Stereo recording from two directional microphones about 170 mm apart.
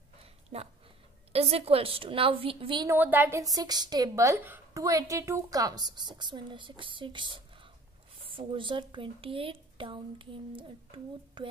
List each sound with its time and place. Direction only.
0.2 s a sound: 35° right (ahead or behind)
1.3 s speech: 35° right (ahead or behind)
2.9 s a woman's voice: 10° right (ahead or behind); by 11.5 s 25° right (ahead or behind)